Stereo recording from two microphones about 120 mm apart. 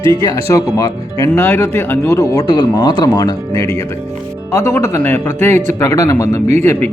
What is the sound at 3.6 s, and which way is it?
Speech, 20° left (ahead or behind).